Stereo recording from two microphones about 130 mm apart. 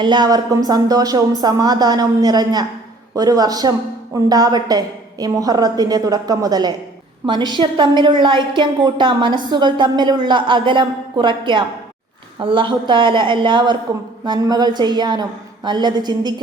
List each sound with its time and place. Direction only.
0.0 s a woman's voice: 35° right (ahead or behind)